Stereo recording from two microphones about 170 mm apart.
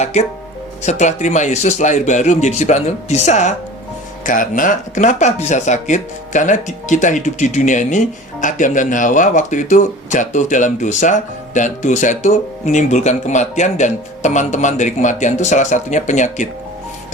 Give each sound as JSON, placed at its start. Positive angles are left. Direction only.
{"t": 0.0, "sound": "speech", "side_deg": 40}